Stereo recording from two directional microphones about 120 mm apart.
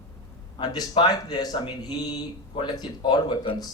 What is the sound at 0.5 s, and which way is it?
Speech, 40° left (ahead or behind).